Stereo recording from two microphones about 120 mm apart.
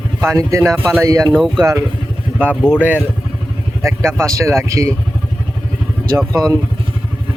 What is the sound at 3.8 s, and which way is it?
Speech, 25° right (ahead or behind).